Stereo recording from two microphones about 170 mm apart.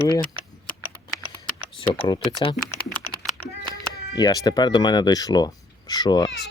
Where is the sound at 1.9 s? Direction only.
30° left (ahead or behind).